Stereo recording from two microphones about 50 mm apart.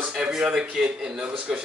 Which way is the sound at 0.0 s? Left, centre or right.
Centre.